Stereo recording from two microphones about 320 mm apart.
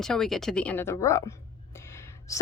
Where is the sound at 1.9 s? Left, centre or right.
Centre.